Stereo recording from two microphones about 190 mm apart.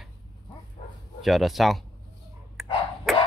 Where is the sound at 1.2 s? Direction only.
Centre (ahead or behind).